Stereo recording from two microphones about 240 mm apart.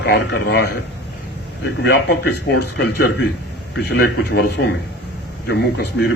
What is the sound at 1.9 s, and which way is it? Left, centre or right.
Speech, left.